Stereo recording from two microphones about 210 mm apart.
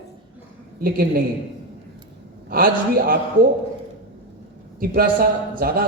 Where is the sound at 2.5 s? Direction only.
45° right (ahead or behind).